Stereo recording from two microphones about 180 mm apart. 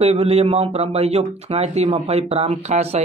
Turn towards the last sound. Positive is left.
turn(degrees=-35)  # may be behind; listen again after turning